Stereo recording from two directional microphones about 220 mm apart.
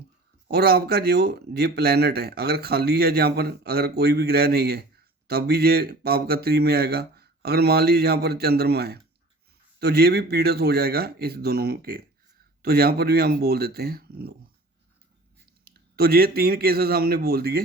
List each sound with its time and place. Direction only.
0.4 s speech: 45° right (ahead or behind)
15.6 s speech: 45° right (ahead or behind)